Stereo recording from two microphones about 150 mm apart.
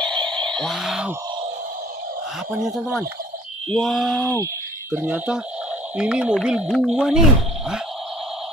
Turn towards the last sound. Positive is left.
turn(degrees=-5)  # may be behind; listen again after turning